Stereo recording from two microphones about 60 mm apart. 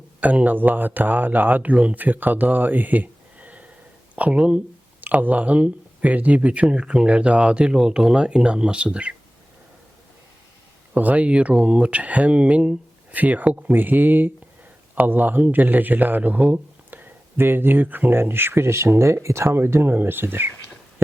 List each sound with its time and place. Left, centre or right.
0.2 s a man's voice: right
4.9 s speech: right
10.9 s a man's voice: right
19.5 s a man's voice: right